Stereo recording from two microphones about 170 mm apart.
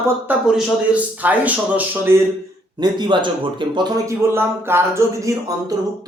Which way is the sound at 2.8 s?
25° right (ahead or behind).